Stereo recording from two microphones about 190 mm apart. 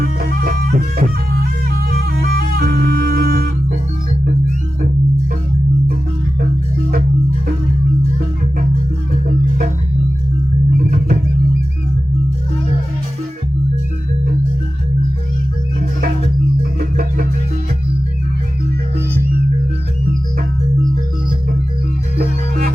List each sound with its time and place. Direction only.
0.0 s music: 50° right (ahead or behind)
22.2 s music: 50° right (ahead or behind)